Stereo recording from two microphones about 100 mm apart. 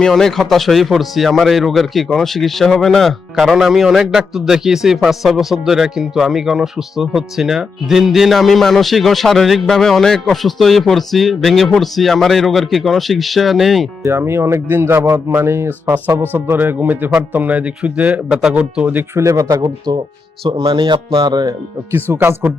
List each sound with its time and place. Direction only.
0.0 s speech: 5° left (ahead or behind)
14.0 s speech: 25° right (ahead or behind)
19.1 s speech: 30° right (ahead or behind)
19.6 s speech: 45° right (ahead or behind)
20.6 s speech: 60° right (ahead or behind)
21.9 s speech: 20° right (ahead or behind)